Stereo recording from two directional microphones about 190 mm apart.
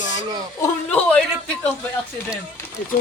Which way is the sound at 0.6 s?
10° left (ahead or behind).